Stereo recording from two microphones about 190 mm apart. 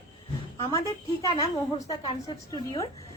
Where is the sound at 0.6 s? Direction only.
15° left (ahead or behind).